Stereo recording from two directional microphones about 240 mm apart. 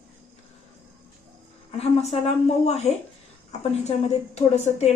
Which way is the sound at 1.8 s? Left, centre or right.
Left.